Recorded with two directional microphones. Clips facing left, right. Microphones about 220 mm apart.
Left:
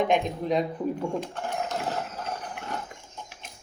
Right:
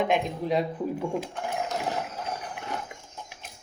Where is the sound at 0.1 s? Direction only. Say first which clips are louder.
Left 1 dB; 5° right (ahead or behind).